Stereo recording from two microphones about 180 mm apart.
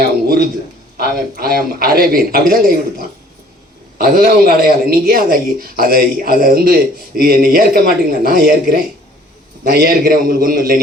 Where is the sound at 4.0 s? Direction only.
55° right (ahead or behind).